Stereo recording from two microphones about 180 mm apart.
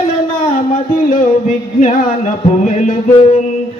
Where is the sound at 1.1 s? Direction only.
45° left (ahead or behind).